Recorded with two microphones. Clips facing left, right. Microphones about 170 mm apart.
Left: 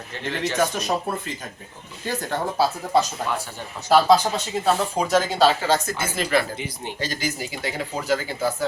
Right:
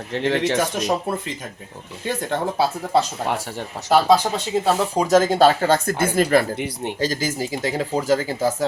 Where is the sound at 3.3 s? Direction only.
70° right (ahead or behind).